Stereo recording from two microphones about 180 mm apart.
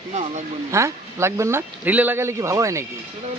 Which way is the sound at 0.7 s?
15° right (ahead or behind).